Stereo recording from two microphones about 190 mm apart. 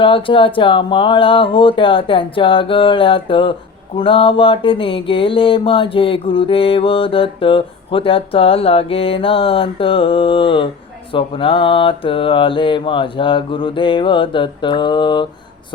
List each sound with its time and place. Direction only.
0.0 s mantra: 25° left (ahead or behind)